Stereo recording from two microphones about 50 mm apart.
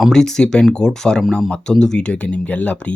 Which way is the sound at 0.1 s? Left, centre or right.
Centre.